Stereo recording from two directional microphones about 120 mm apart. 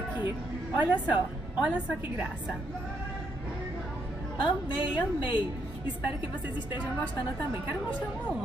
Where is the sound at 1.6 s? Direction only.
10° right (ahead or behind).